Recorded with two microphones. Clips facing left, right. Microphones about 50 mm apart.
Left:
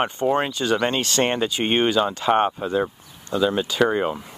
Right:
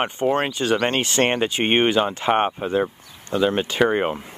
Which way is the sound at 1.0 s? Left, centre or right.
Right.